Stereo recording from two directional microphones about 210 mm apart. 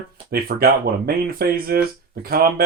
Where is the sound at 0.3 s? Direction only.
45° right (ahead or behind).